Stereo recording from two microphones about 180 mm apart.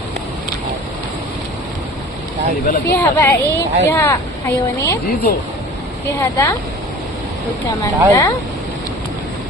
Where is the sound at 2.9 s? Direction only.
10° left (ahead or behind).